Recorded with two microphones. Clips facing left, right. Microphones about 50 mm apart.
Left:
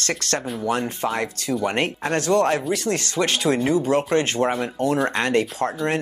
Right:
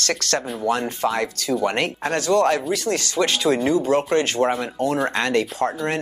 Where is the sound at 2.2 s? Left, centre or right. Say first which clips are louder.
Right 1 dB; left.